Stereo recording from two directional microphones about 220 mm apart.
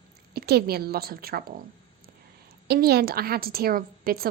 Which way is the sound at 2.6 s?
45° right (ahead or behind).